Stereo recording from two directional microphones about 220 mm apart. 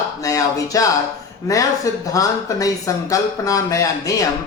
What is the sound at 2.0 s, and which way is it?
Speech, 15° left (ahead or behind).